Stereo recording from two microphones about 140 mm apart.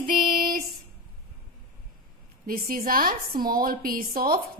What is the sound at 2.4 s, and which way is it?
A woman's voice, 90° right.